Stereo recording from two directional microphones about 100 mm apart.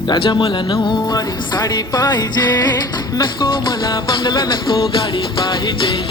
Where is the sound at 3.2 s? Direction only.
50° left (ahead or behind).